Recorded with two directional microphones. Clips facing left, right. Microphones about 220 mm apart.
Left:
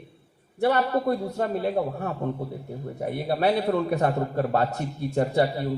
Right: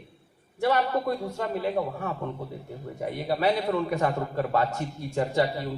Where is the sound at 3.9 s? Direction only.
35° left (ahead or behind).